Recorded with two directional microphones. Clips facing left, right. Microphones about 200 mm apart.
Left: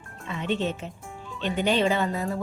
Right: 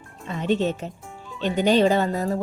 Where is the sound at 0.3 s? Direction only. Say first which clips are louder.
Right 5 dB; 40° right (ahead or behind).